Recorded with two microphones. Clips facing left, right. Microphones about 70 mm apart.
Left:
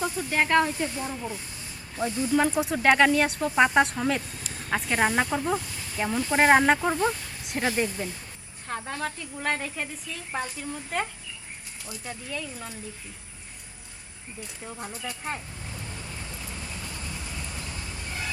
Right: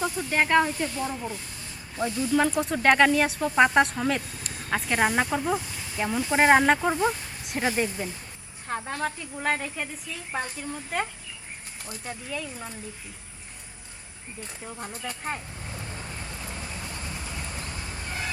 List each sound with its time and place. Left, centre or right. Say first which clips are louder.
0.0 s speech: right 1 dB; centre
7.4 s a sound: even; centre
7.8 s speech: even; centre
14.6 s speech: even; centre
15.7 s vehicle: right 2 dB; right
16.7 s goose: right 1 dB; right